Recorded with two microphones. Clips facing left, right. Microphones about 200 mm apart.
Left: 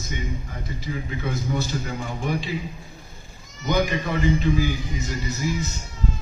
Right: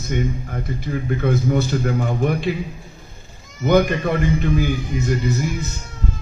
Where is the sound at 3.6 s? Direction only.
55° right (ahead or behind).